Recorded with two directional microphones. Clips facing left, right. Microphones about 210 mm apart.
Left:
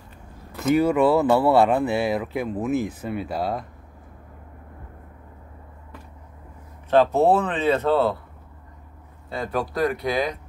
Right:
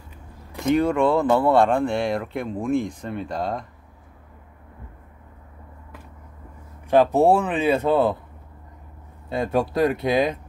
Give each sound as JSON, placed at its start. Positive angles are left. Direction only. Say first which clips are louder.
{"t": 0.7, "sound": "speech", "louder": "left 1 dB", "side_deg": 5}
{"t": 6.9, "sound": "speech", "louder": "right 1 dB", "side_deg": -15}
{"t": 9.3, "sound": "speech", "louder": "right 4 dB", "side_deg": -25}